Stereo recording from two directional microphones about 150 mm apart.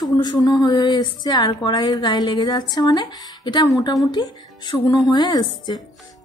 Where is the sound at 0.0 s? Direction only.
25° left (ahead or behind).